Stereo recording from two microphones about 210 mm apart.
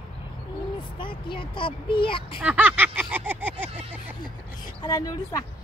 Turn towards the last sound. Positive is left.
turn(degrees=20)  # may be behind; listen again after turning